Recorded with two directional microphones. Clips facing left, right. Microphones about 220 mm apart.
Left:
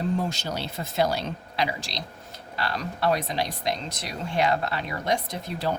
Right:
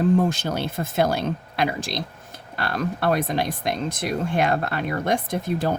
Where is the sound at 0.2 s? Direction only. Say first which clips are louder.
Right 7 dB; 55° right (ahead or behind).